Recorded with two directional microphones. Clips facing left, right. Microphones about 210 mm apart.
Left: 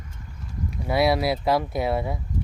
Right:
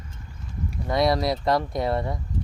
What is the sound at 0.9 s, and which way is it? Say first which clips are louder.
Speech: left 1 dB; 5° left (ahead or behind).